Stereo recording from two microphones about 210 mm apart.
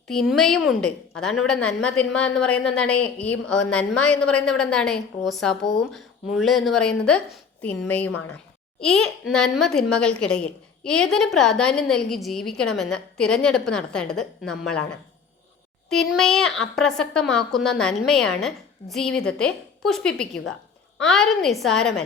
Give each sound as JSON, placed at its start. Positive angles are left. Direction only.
{"t": 0.1, "sound": "a child's voice", "side_deg": 0}
{"t": 15.9, "sound": "a child's voice", "side_deg": 0}